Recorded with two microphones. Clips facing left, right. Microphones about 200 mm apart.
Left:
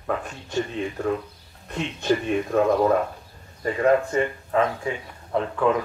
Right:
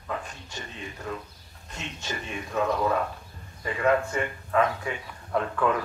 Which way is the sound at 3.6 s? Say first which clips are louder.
Left 4 dB; 35° left (ahead or behind).